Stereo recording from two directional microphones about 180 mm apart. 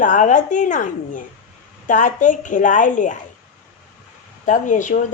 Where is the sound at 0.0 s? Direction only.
45° left (ahead or behind).